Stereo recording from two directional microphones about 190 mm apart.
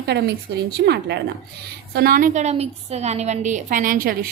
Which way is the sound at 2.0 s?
50° right (ahead or behind).